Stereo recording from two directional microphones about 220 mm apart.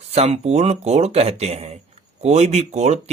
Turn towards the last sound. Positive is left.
turn(degrees=-30)  # may be behind; listen again after turning